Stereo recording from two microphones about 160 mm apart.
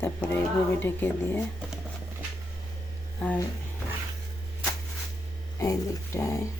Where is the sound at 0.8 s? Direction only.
15° left (ahead or behind).